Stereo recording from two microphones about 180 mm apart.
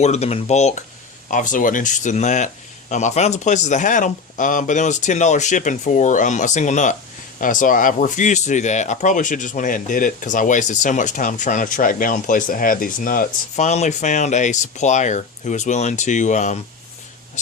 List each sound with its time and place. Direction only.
0.0 s speech: 35° left (ahead or behind)